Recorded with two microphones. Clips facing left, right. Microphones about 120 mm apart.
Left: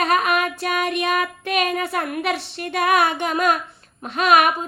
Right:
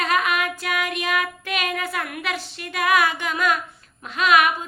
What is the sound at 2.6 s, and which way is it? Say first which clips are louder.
Female singing: left 2 dB; 30° left (ahead or behind).